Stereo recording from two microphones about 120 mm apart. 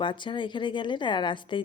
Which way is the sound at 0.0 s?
45° left (ahead or behind).